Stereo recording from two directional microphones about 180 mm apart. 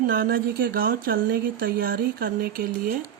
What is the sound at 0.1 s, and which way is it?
Speech, 55° right (ahead or behind).